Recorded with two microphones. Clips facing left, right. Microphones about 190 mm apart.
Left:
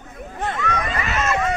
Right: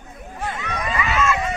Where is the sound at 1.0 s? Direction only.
40° left (ahead or behind).